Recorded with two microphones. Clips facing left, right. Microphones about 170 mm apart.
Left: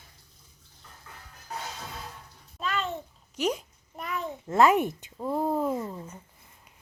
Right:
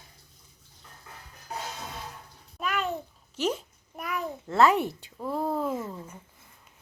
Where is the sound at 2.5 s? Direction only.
15° right (ahead or behind).